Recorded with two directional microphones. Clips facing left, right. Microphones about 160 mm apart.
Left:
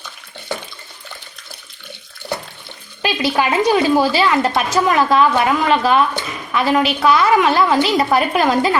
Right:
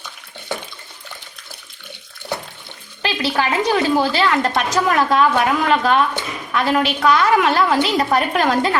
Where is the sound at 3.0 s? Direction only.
15° left (ahead or behind).